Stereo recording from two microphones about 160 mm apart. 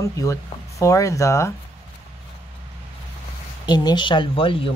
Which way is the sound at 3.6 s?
25° left (ahead or behind).